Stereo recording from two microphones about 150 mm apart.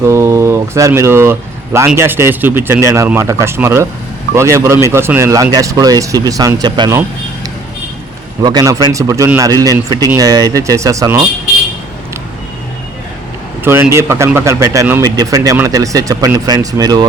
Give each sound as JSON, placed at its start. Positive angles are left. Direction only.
{"t": 0.0, "sound": "speech", "side_deg": -20}
{"t": 8.4, "sound": "speech", "side_deg": -25}
{"t": 13.9, "sound": "speech", "side_deg": -20}